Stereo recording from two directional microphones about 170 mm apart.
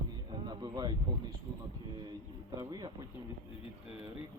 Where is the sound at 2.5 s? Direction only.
25° right (ahead or behind).